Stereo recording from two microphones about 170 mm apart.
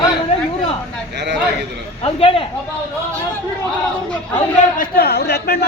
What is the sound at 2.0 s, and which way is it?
Speech, 35° left (ahead or behind).